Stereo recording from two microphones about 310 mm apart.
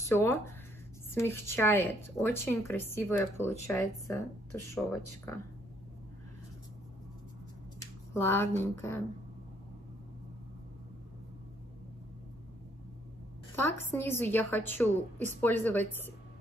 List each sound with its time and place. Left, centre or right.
0.0 s speech: centre
8.1 s speech: centre
13.6 s speech: centre